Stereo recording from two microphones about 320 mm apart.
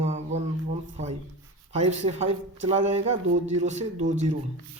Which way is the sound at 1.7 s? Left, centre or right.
Right.